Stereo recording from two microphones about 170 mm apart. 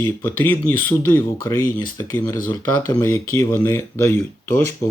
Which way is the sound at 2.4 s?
25° left (ahead or behind).